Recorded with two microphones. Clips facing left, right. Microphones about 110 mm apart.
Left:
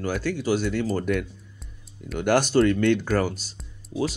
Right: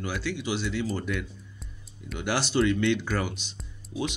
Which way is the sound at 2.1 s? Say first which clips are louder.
Left 6 dB; 50° left (ahead or behind).